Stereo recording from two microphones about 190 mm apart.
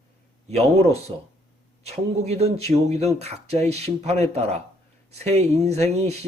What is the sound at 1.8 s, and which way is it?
Speech, 35° right (ahead or behind).